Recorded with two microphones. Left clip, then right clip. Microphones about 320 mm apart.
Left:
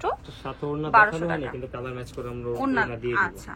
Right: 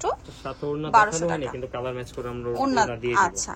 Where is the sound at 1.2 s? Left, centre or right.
Centre.